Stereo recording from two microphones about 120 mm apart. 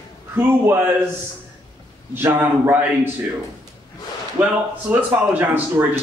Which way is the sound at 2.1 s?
20° right (ahead or behind).